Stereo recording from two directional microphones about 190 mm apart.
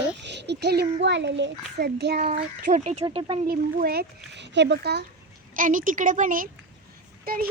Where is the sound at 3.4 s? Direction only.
50° right (ahead or behind).